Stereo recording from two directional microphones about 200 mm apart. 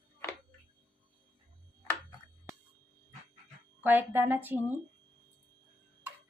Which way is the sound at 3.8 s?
10° right (ahead or behind).